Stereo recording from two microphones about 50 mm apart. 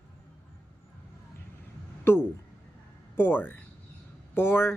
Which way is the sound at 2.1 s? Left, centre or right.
Left.